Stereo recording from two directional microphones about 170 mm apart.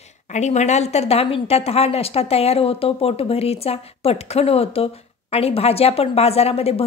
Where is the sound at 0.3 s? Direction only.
45° left (ahead or behind).